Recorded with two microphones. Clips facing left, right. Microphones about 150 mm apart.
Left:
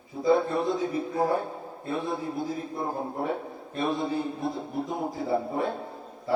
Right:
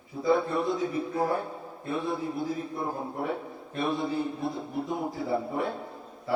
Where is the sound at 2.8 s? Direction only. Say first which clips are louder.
Left 2 dB; 35° left (ahead or behind).